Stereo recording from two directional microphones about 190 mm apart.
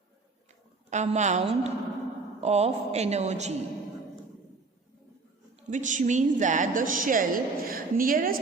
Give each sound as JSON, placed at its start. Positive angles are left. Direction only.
{"t": 0.9, "sound": "a woman's voice", "side_deg": -40}
{"t": 5.6, "sound": "a woman's voice", "side_deg": -40}